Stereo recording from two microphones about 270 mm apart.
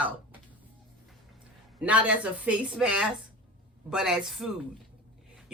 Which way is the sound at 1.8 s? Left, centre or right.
Centre.